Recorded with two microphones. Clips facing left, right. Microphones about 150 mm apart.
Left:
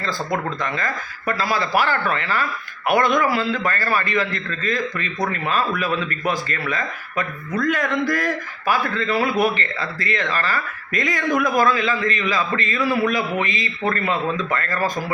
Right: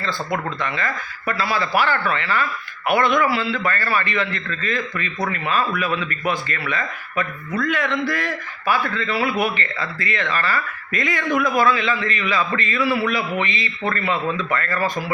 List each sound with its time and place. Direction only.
1.3 s a man's voice: 40° left (ahead or behind)